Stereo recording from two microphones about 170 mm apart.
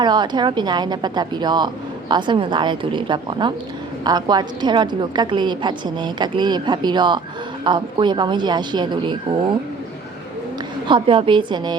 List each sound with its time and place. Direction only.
0.0 s speech: 25° right (ahead or behind)
10.8 s speech: 30° right (ahead or behind)